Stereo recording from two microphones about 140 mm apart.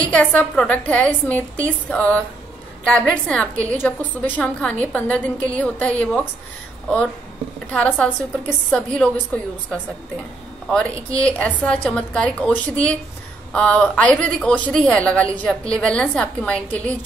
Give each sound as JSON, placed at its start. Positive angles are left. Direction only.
{"t": 0.1, "sound": "a woman's voice", "side_deg": 10}
{"t": 7.7, "sound": "a woman's voice", "side_deg": 10}